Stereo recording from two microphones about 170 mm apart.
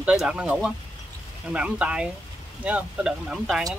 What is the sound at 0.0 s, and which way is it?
Speech, 5° right (ahead or behind).